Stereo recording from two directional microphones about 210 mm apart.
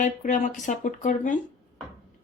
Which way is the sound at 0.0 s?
40° left (ahead or behind).